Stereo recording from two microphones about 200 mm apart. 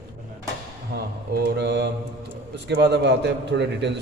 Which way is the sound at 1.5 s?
60° right (ahead or behind).